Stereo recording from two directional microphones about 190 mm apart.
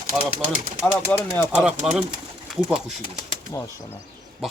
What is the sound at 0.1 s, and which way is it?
Speech, 5° right (ahead or behind).